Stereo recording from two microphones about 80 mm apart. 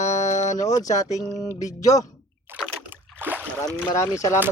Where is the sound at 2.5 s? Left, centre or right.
Right.